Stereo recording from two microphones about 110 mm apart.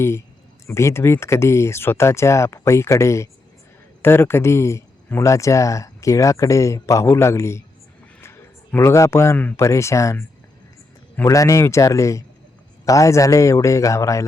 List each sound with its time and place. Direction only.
0.7 s speech: 25° left (ahead or behind)
8.2 s a sound: 20° left (ahead or behind)
9.6 s speech: 25° left (ahead or behind)